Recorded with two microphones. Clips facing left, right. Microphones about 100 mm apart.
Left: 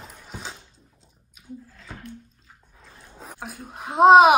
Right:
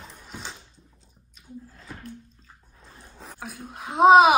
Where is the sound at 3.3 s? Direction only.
Centre (ahead or behind).